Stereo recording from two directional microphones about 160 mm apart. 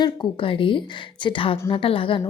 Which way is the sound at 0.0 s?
30° left (ahead or behind).